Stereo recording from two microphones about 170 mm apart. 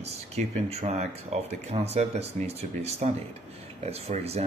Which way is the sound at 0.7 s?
40° right (ahead or behind).